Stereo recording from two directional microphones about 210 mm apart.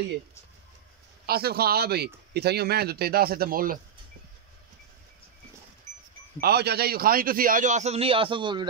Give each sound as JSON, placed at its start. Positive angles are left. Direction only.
{"t": 1.2, "sound": "speech", "side_deg": -50}
{"t": 6.4, "sound": "a man's voice", "side_deg": -50}